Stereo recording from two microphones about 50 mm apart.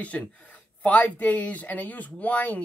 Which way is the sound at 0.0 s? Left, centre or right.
Left.